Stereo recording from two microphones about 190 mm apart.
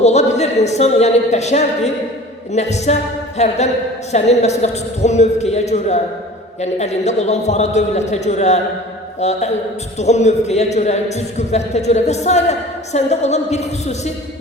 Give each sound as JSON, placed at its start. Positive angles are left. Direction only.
{"t": 0.0, "sound": "a man's voice", "side_deg": 35}